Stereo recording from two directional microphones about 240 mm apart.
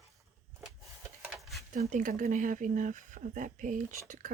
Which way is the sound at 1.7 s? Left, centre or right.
Right.